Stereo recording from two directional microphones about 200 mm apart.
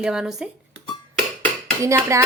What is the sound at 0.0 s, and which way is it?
Speech, 5° right (ahead or behind).